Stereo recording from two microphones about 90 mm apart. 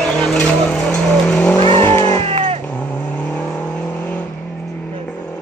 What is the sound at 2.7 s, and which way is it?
Car, 20° left (ahead or behind).